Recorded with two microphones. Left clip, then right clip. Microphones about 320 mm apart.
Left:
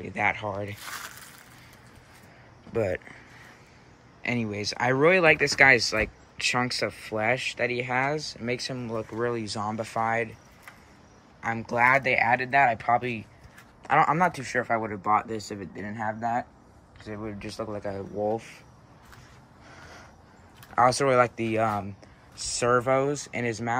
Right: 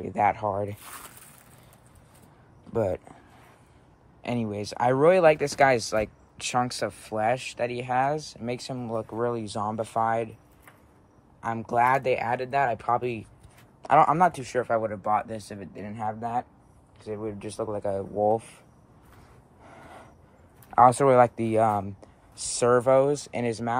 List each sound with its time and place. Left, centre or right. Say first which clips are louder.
0.0 s speech: right 3 dB; centre
2.7 s speech: right 1 dB; centre
4.2 s speech: left 1 dB; centre
11.4 s speech: even; centre
20.7 s speech: right 3 dB; centre